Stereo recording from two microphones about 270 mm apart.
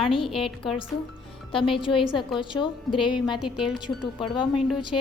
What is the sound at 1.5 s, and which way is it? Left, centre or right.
A woman's voice, centre.